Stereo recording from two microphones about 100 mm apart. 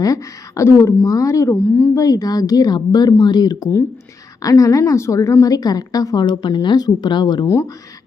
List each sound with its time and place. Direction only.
0.0 s a woman's voice: 35° left (ahead or behind)